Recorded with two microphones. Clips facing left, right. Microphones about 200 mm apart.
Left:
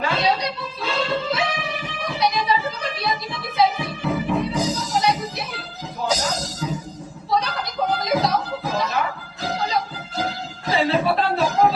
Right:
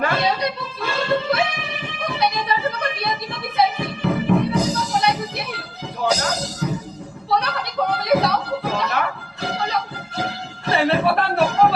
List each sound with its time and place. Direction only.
0.0 s music: 55° right (ahead or behind)
7.3 s a sound: 65° right (ahead or behind)
9.4 s music: 65° right (ahead or behind)